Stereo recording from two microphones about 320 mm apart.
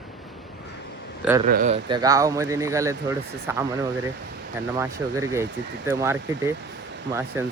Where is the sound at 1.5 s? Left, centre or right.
Right; by 6.5 s centre.